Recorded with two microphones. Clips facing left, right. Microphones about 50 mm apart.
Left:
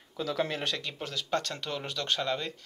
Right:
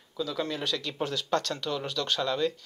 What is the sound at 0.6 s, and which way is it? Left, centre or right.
Speech, left.